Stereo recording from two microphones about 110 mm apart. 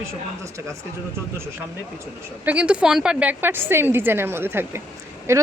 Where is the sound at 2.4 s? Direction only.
10° right (ahead or behind).